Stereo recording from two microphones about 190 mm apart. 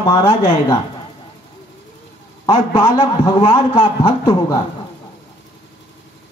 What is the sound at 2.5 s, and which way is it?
A man's voice, 25° left (ahead or behind).